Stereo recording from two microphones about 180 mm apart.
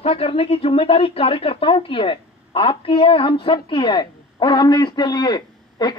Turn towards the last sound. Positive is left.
turn(degrees=25)  # may be behind; listen again after turning